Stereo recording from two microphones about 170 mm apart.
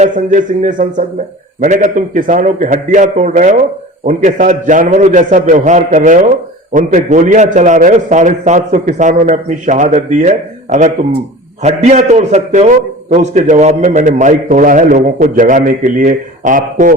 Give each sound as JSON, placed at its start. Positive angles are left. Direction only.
{"t": 0.0, "sound": "a man's voice", "side_deg": -45}